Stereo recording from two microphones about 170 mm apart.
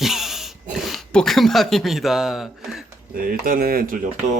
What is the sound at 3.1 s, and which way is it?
Speech, 60° right (ahead or behind).